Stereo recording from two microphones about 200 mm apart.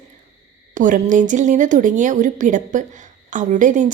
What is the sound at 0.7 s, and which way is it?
Speech, 40° right (ahead or behind).